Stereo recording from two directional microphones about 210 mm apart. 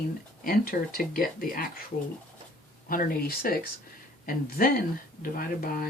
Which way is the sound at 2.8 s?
45° left (ahead or behind).